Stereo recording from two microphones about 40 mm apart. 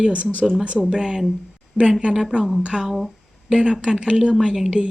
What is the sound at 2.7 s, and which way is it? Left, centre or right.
Speech, centre.